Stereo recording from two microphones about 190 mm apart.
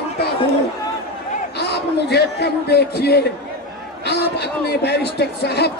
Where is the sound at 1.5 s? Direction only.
60° left (ahead or behind).